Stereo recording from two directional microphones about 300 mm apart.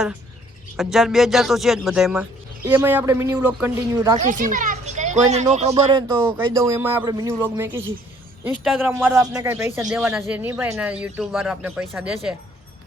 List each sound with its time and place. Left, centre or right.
0.8 s a man's voice: centre
4.2 s speech: right
6.3 s a man's voice: centre